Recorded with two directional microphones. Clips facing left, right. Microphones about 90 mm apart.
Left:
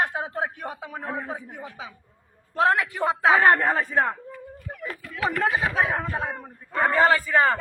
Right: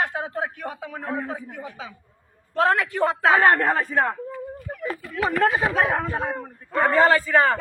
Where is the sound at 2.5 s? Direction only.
5° left (ahead or behind).